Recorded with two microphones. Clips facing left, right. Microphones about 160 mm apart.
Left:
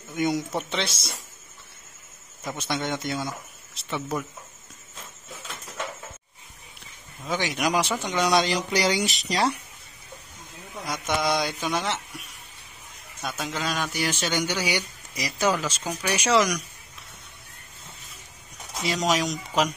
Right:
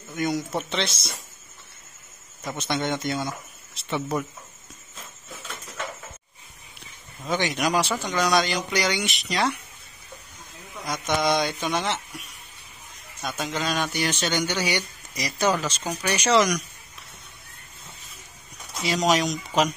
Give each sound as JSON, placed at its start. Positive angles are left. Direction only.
{"t": 0.1, "sound": "speech", "side_deg": 20}
{"t": 2.4, "sound": "speech", "side_deg": 5}
{"t": 7.2, "sound": "speech", "side_deg": 5}
{"t": 10.9, "sound": "speech", "side_deg": 5}
{"t": 13.2, "sound": "speech", "side_deg": 5}
{"t": 19.0, "sound": "speech", "side_deg": 0}